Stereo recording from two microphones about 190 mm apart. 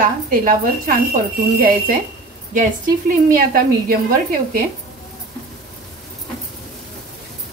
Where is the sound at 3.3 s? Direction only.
50° right (ahead or behind).